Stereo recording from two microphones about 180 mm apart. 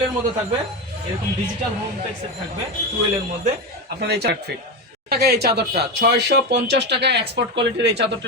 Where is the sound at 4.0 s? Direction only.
65° right (ahead or behind).